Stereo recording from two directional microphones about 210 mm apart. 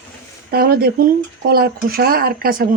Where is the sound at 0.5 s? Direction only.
45° right (ahead or behind).